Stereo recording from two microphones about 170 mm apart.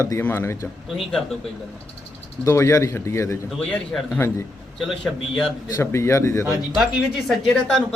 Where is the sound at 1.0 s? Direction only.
Centre (ahead or behind).